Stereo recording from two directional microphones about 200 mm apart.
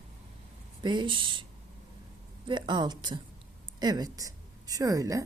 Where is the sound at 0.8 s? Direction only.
25° right (ahead or behind).